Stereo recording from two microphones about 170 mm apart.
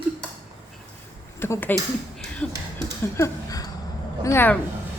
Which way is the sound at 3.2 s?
20° left (ahead or behind).